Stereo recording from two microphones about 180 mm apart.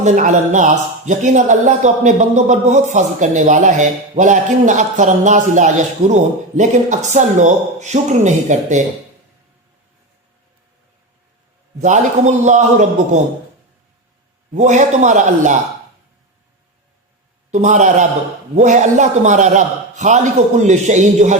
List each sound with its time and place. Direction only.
0.0 s a man's voice: 40° right (ahead or behind)
11.8 s a man's voice: 40° right (ahead or behind)
14.5 s speech: 40° right (ahead or behind)
17.5 s a man's voice: 45° right (ahead or behind)